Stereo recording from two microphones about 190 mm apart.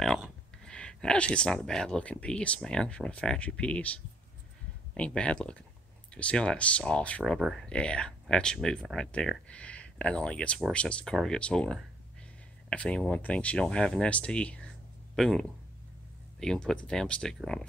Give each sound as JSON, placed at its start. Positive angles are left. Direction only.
{"t": 0.0, "sound": "speech", "side_deg": 0}